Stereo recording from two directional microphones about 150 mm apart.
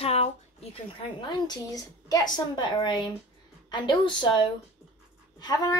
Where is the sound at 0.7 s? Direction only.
30° left (ahead or behind).